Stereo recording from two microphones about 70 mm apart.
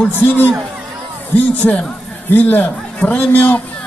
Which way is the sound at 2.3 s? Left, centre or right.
Left.